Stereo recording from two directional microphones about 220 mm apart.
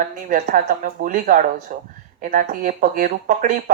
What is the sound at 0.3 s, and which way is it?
A woman's voice, 40° right (ahead or behind).